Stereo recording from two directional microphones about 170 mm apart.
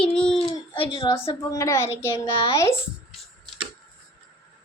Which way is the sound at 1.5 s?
15° left (ahead or behind).